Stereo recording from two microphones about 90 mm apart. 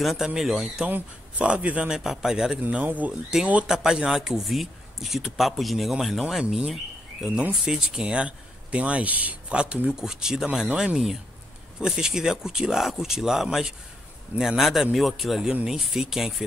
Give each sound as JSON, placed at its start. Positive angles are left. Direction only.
{"t": 0.0, "sound": "speech", "side_deg": -5}
{"t": 2.6, "sound": "speech", "side_deg": -20}